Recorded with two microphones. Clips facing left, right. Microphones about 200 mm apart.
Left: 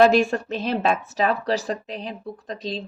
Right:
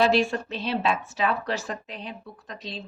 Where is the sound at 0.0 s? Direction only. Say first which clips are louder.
Left 5 dB; 45° left (ahead or behind).